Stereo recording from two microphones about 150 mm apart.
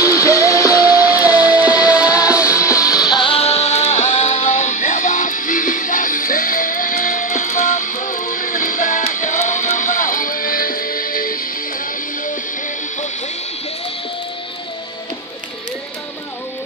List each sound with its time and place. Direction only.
0.0 s music: 20° left (ahead or behind)
1.2 s music: 10° right (ahead or behind)
2.6 s music: 20° left (ahead or behind)
3.1 s music: 35° left (ahead or behind); by 11.4 s 70° left (ahead or behind)